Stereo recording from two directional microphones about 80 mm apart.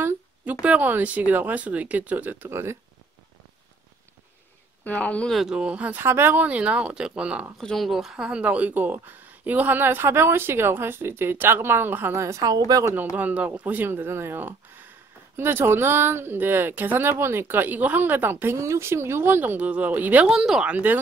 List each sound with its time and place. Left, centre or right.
0.0 s a sound: right
0.6 s speech: centre
4.8 s speech: centre
5.3 s speech: centre
6.0 s speech: right
7.5 s speech: centre; by 12.2 s right
12.2 s a woman's voice: right
12.9 s speech: centre
20.2 s speech: centre
20.7 s speech: right